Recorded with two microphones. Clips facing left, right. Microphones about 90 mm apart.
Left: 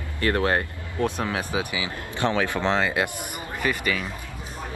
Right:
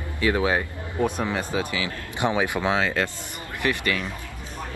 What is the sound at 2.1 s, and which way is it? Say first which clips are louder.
Speech: even; 15° right (ahead or behind).